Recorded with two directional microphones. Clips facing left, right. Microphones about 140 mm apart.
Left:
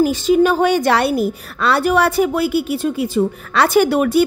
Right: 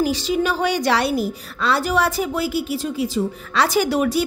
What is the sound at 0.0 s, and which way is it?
A woman's voice, 50° left (ahead or behind).